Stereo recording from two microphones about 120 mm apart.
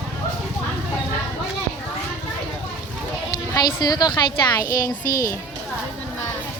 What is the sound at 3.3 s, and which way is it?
Speech, 35° left (ahead or behind).